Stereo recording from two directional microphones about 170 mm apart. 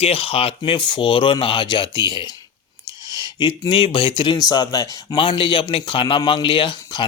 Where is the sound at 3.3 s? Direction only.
25° left (ahead or behind).